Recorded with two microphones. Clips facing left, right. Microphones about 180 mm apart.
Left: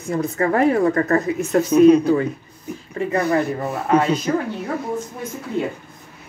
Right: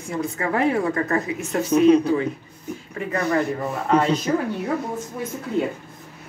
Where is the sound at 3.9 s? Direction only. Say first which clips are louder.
Left 2 dB; 5° left (ahead or behind).